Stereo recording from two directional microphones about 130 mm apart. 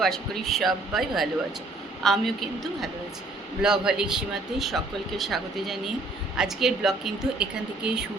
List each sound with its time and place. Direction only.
0.0 s a woman's voice: centre (ahead or behind)